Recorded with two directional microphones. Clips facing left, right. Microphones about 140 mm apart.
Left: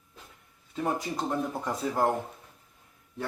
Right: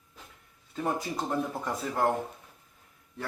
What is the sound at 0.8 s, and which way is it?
Speech, centre (ahead or behind).